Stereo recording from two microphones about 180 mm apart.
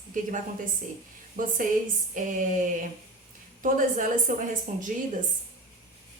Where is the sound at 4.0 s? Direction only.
45° right (ahead or behind).